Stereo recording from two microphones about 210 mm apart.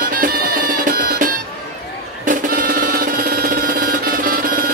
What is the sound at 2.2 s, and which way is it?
Music, 40° right (ahead or behind).